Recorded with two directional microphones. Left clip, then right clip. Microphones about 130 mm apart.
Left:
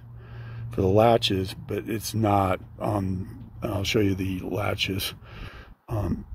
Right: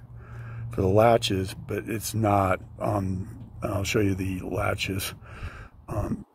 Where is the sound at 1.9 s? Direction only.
20° left (ahead or behind).